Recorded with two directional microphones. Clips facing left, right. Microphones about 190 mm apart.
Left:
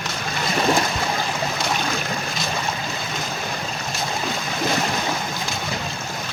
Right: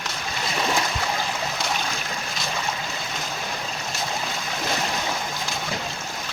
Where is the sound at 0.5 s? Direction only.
50° left (ahead or behind).